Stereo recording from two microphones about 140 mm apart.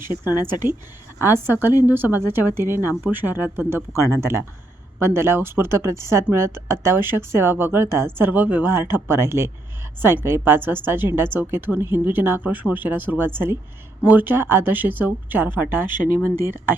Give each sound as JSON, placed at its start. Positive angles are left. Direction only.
{"t": 0.3, "sound": "a woman's voice", "side_deg": -15}